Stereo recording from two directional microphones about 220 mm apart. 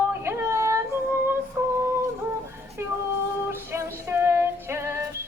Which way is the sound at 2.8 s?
10° right (ahead or behind).